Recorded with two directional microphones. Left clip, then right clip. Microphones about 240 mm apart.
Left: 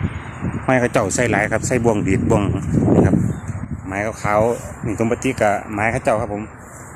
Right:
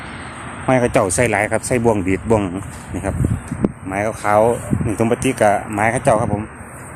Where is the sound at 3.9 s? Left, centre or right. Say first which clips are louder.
Right 2 dB; centre.